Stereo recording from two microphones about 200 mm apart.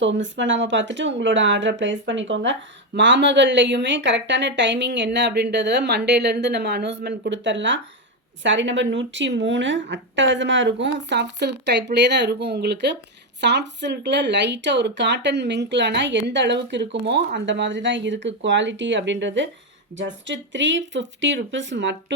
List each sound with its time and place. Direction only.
0.0 s speech: 65° right (ahead or behind)